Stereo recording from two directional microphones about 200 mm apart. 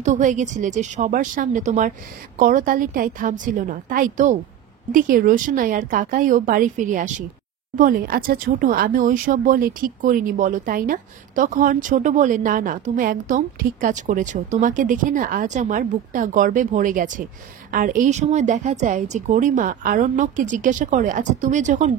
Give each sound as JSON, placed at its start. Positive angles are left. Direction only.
{"t": 0.0, "sound": "a woman's voice", "side_deg": -40}